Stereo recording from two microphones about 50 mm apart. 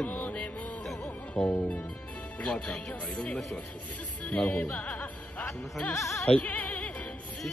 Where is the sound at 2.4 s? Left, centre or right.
Left.